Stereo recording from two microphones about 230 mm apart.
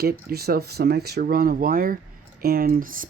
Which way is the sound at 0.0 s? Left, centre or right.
Right.